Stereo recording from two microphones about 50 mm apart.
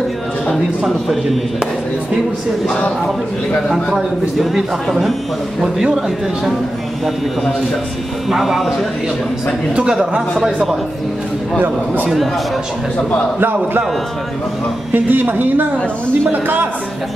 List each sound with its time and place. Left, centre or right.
0.8 s a man's voice: centre
3.6 s a man's voice: centre
8.3 s a man's voice: centre
9.8 s a man's voice: centre
14.9 s a woman's voice: right